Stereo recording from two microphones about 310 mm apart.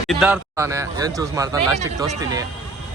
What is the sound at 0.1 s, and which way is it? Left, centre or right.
Speech, centre.